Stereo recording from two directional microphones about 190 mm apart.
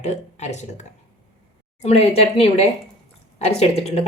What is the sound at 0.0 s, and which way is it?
Speech, 35° left (ahead or behind).